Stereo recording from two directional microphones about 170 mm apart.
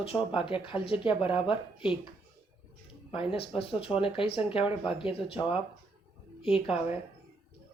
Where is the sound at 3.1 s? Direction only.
35° left (ahead or behind).